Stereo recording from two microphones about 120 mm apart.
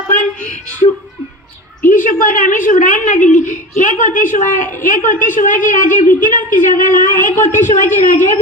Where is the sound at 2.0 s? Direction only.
90° left.